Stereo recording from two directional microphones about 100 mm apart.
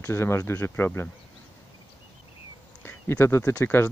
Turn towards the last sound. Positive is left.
turn(degrees=25)  # may be behind; listen again after turning